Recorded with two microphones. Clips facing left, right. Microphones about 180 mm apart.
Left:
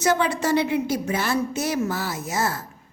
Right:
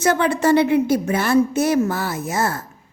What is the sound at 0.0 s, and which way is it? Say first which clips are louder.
A woman's voice: right 4 dB; 55° right (ahead or behind).